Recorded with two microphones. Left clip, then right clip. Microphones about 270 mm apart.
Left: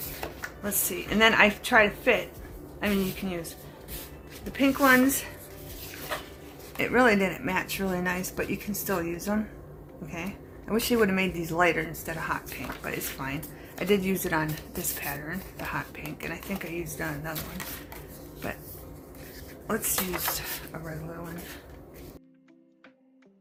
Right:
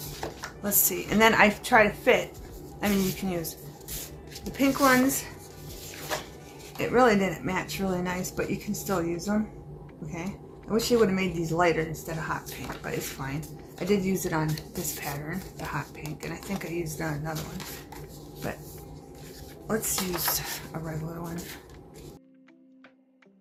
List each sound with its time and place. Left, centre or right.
0.2 s speech: centre
4.5 s speech: centre
6.7 s speech: centre
10.7 s speech: left
19.6 s speech: centre